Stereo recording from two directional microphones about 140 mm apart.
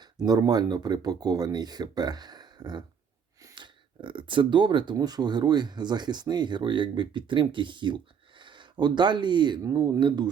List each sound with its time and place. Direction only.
0.3 s speech: 30° right (ahead or behind)
10.0 s speech: 35° right (ahead or behind)